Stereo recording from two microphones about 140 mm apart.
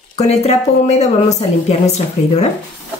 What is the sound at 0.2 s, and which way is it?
Speech, 50° left (ahead or behind).